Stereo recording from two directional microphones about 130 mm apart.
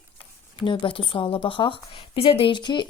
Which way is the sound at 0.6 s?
40° left (ahead or behind).